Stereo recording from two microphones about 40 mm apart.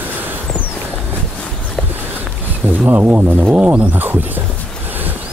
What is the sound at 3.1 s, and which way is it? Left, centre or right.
Speech, right.